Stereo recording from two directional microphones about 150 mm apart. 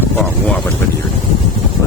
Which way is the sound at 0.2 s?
10° left (ahead or behind).